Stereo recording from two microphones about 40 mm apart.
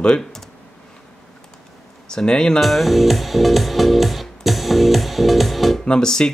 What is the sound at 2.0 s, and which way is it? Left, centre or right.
Speech, centre.